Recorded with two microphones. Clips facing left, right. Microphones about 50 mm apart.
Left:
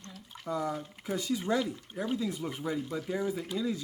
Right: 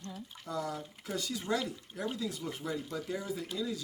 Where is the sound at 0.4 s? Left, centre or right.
Left.